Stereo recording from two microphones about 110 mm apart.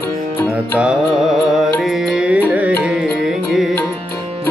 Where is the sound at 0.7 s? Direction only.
5° right (ahead or behind).